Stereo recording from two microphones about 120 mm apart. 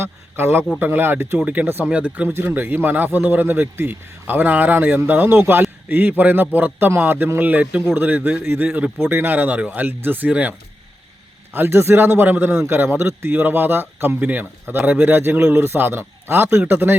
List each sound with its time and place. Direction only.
0.0 s a man's voice: 20° right (ahead or behind)
11.5 s a man's voice: 20° right (ahead or behind)